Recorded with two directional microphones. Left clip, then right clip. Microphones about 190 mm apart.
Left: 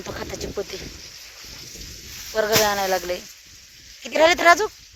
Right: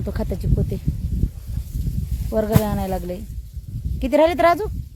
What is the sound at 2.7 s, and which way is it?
Speech, 5° left (ahead or behind).